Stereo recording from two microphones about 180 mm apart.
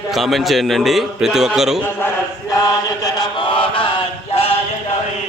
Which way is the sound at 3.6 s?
30° left (ahead or behind).